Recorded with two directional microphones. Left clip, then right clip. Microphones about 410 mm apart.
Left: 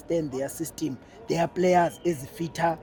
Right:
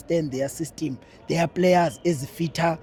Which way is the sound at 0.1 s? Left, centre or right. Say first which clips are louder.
Right 3 dB; right.